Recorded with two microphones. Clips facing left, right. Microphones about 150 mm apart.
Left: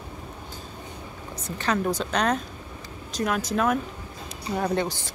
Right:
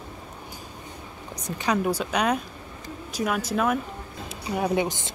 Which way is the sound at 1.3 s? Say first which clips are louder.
Right 1 dB; 15° right (ahead or behind).